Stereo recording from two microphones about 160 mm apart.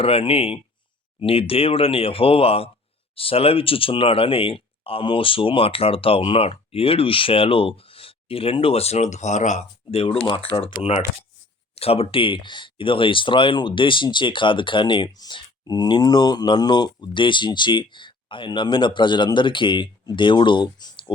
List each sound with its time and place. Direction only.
0.0 s speech: 35° left (ahead or behind)